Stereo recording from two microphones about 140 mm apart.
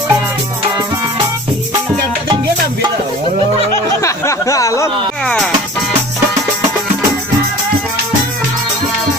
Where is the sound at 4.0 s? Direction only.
20° left (ahead or behind).